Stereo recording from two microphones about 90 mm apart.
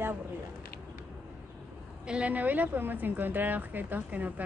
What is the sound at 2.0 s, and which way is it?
Speech, 15° right (ahead or behind).